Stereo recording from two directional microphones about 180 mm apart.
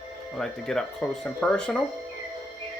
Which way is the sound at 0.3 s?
5° left (ahead or behind).